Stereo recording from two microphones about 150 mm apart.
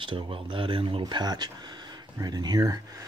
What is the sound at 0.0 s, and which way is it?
Speech, 35° right (ahead or behind).